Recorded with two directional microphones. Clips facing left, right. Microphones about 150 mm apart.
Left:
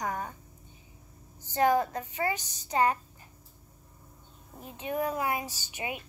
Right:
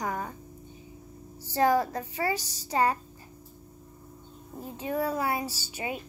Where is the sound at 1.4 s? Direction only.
35° right (ahead or behind).